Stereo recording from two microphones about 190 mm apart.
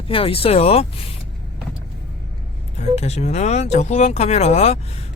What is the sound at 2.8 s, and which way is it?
Speech, 35° left (ahead or behind).